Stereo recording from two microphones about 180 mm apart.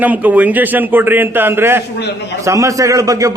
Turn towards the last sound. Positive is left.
turn(degrees=-20)  # may be behind; listen again after turning